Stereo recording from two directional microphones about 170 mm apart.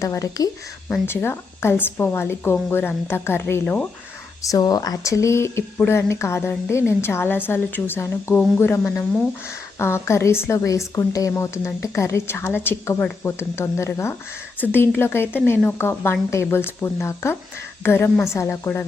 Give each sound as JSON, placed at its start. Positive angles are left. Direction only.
{"t": 0.0, "sound": "speech", "side_deg": 20}
{"t": 4.4, "sound": "speech", "side_deg": 20}